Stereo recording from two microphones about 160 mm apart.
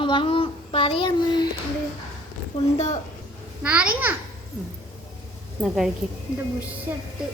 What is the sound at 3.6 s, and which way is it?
Speech, 10° right (ahead or behind).